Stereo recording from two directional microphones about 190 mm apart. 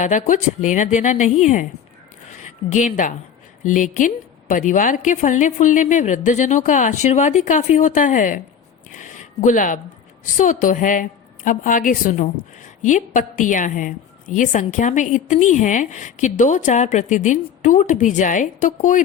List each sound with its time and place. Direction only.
0.0 s a woman's voice: 40° left (ahead or behind)
8.9 s a sound: 40° left (ahead or behind)
10.3 s a woman's voice: 45° left (ahead or behind)